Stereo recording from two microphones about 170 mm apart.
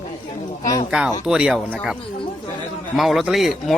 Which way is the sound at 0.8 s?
5° right (ahead or behind).